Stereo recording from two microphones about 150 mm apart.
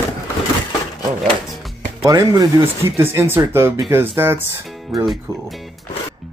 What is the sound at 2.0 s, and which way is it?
Speech, 25° right (ahead or behind).